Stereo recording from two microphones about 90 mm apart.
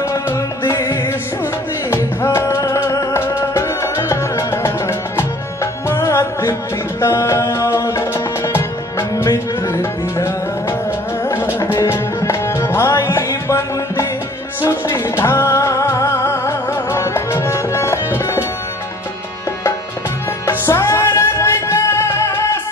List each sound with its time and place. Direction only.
0.0 s music: 35° left (ahead or behind)
20.4 s music: 30° left (ahead or behind)